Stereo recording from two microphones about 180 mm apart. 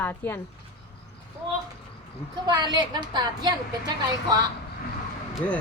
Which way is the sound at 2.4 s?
25° right (ahead or behind).